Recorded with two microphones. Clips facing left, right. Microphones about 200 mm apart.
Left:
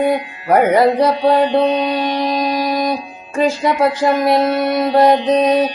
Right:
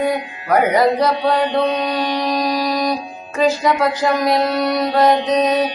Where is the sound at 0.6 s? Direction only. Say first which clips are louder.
Left 3 dB; 55° left (ahead or behind).